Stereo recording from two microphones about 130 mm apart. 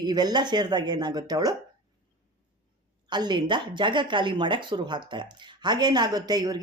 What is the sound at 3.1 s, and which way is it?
Speech, 35° right (ahead or behind).